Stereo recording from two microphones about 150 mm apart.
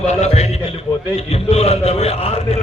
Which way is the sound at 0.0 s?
50° left (ahead or behind).